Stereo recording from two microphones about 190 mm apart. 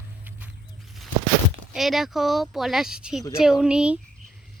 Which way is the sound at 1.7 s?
Centre (ahead or behind).